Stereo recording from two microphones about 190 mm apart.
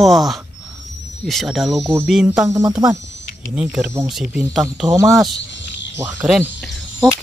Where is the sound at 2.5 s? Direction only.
15° right (ahead or behind).